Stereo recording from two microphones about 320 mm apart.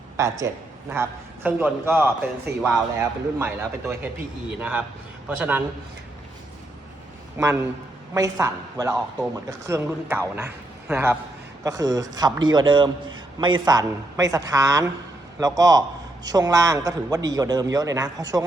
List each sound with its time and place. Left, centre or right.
0.2 s speech: centre
5.4 s a man's voice: centre
7.3 s speech: centre